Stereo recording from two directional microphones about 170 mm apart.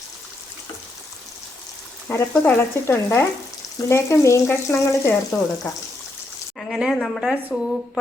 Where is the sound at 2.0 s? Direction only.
10° left (ahead or behind).